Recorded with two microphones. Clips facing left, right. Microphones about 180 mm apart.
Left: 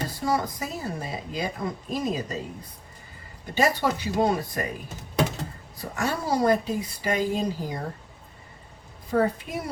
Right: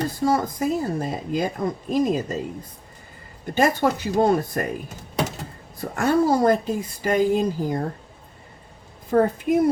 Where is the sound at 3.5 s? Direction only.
50° right (ahead or behind).